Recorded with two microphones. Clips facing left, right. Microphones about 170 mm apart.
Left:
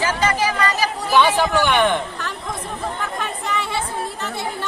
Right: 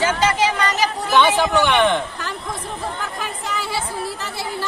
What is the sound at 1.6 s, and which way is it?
Speech, centre (ahead or behind).